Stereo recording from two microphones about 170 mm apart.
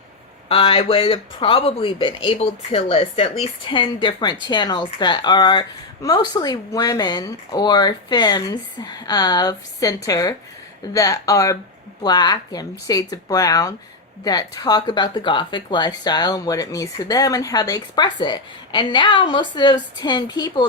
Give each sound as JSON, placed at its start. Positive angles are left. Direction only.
{"t": 0.4, "sound": "speech", "side_deg": 30}